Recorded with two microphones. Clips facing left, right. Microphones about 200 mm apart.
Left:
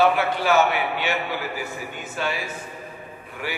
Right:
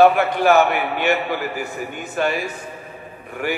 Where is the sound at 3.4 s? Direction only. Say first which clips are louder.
Right 7 dB; 50° right (ahead or behind).